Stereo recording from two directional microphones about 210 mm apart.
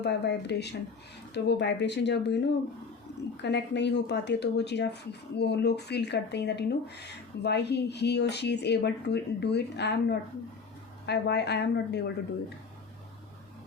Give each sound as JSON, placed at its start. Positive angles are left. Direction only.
{"t": 0.0, "sound": "speech", "side_deg": 55}
{"t": 3.4, "sound": "speech", "side_deg": 55}